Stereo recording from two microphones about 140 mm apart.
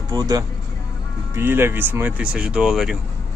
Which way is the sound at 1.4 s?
15° right (ahead or behind).